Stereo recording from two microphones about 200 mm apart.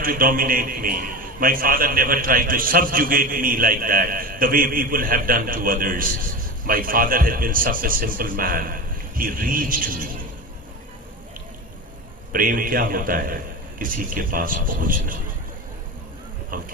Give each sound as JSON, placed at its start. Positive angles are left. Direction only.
{"t": 0.0, "sound": "a man's voice", "side_deg": -45}
{"t": 12.3, "sound": "a man's voice", "side_deg": -45}
{"t": 16.5, "sound": "a man's voice", "side_deg": -45}